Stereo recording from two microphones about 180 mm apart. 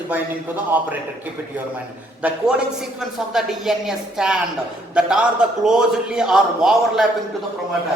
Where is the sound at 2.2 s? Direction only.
5° right (ahead or behind).